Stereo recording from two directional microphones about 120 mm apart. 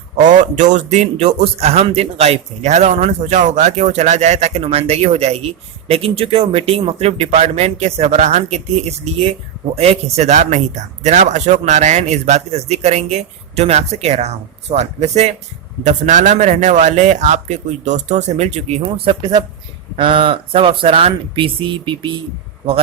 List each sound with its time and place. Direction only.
0.2 s a man's voice: 90° right; by 15.3 s 65° right (ahead or behind)
15.8 s speech: 90° right; by 18.8 s 70° right (ahead or behind)
18.8 s speech: 40° right (ahead or behind)